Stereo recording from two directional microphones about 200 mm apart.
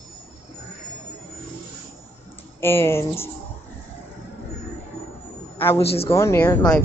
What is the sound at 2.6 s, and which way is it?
Speech, 10° left (ahead or behind).